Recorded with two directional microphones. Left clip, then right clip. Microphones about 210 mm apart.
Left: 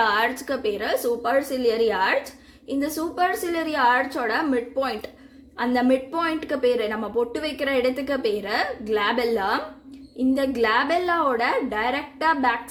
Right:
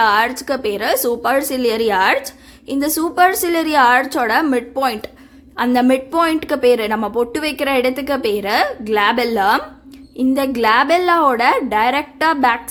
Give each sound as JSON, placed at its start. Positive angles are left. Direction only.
{"t": 0.0, "sound": "a woman's voice", "side_deg": -20}